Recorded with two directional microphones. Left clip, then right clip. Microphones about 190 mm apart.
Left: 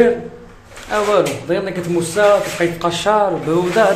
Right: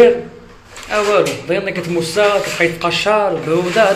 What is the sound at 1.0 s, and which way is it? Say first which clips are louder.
Speech: right 1 dB; 15° left (ahead or behind).